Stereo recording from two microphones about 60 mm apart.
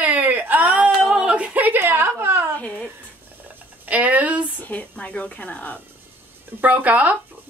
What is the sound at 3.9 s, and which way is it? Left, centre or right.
Speech, right.